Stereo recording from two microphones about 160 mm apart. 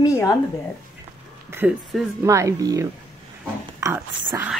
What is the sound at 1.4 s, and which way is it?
Speech, 15° right (ahead or behind).